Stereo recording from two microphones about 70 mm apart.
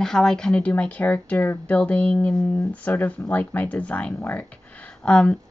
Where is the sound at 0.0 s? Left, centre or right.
Centre.